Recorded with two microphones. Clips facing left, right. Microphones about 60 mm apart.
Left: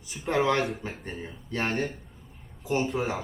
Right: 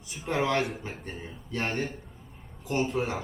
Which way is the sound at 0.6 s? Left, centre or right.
Centre.